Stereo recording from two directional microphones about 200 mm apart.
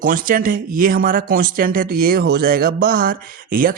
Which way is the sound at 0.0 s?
45° right (ahead or behind).